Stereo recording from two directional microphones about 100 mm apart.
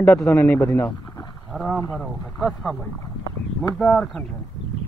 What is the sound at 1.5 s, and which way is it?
Speech, centre (ahead or behind).